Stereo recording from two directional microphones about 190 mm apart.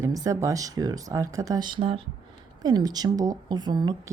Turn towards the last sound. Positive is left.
turn(degrees=-20)  # may be behind; listen again after turning